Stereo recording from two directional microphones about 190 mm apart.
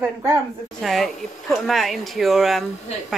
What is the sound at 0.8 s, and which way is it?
Speech, centre (ahead or behind).